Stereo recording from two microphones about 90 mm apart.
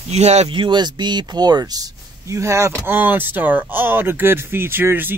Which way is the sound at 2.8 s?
20° right (ahead or behind).